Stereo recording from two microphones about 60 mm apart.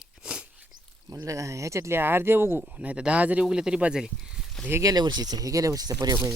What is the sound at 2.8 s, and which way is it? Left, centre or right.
Speech, centre.